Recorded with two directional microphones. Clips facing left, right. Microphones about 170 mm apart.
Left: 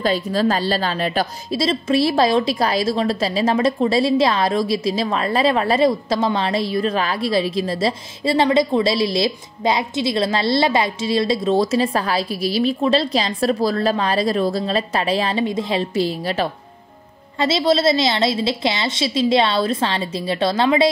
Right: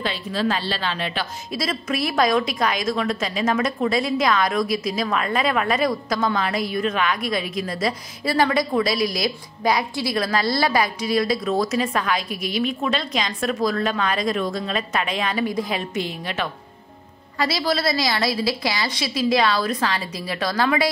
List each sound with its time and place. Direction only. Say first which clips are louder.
0.0 s a woman's voice: left 6 dB; 40° left (ahead or behind)
1.6 s a woman's voice: left 7 dB; 25° left (ahead or behind)
17.4 s a woman's voice: left 5 dB; 25° left (ahead or behind)